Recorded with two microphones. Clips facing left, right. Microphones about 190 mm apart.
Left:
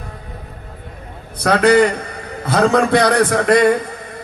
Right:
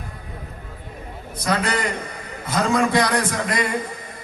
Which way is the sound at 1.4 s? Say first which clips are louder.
Left 11 dB; 65° left (ahead or behind).